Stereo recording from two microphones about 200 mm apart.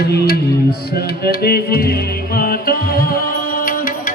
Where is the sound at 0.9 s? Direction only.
50° left (ahead or behind).